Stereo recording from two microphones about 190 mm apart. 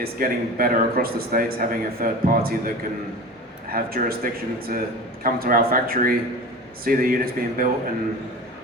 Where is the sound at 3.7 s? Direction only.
50° right (ahead or behind).